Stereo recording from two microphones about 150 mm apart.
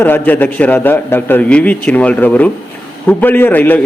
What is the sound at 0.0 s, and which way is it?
A man's voice, 10° left (ahead or behind).